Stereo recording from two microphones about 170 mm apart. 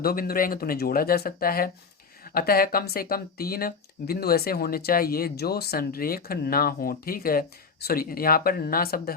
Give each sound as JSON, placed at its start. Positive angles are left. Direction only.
{"t": 0.0, "sound": "speech", "side_deg": 60}